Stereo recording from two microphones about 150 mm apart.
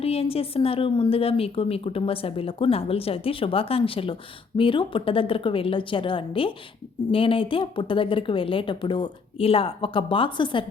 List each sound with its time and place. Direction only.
0.0 s a woman's voice: 40° left (ahead or behind)